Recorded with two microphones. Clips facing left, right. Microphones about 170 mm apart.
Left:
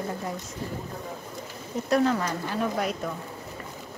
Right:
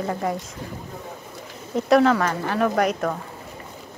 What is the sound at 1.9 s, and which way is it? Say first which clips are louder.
Speech: right 6 dB; 90° right.